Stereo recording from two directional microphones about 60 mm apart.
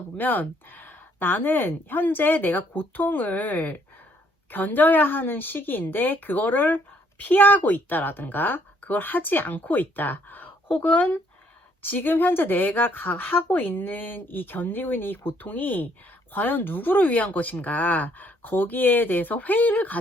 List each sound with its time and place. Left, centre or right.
0.2 s a woman's voice: left